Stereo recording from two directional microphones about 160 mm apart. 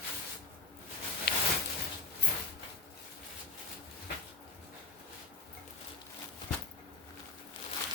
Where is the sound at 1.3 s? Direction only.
85° left.